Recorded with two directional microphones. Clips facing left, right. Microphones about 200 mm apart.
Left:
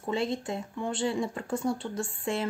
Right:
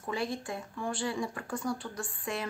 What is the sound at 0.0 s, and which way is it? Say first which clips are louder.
Speech: left 4 dB; 25° left (ahead or behind).